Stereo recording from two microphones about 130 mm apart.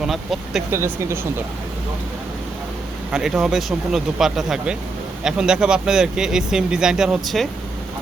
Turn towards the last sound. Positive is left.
turn(degrees=0)  # may be behind; listen again after turning